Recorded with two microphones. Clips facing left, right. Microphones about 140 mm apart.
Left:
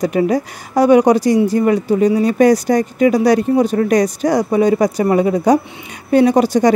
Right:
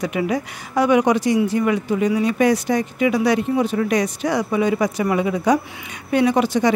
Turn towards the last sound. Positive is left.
turn(degrees=40)  # may be behind; listen again after turning